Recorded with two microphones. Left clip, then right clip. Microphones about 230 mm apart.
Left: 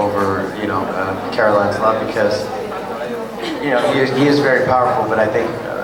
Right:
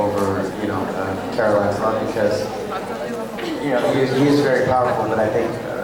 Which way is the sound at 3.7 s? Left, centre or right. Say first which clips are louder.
Left 3 dB; centre.